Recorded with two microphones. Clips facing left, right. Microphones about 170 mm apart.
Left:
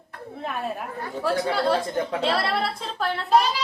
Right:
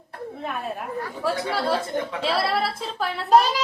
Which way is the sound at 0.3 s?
Centre (ahead or behind).